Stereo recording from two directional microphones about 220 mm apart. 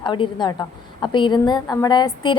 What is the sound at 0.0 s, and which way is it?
A woman's voice, 20° left (ahead or behind).